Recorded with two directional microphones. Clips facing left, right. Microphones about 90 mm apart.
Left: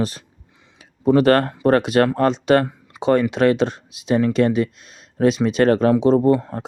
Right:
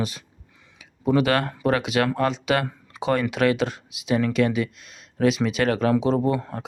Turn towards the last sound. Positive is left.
turn(degrees=35)  # may be behind; listen again after turning